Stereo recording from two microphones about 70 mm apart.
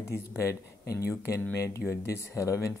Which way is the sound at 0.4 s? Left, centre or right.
Left.